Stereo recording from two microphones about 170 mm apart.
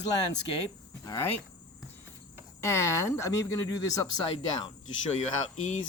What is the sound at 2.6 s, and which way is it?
Speech, 15° left (ahead or behind).